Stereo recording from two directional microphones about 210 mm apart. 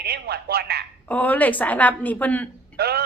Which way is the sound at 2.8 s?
50° right (ahead or behind).